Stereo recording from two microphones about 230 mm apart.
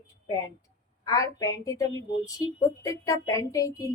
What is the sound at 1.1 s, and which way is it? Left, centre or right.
Speech, centre.